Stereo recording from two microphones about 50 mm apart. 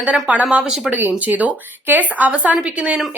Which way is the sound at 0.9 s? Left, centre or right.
Right.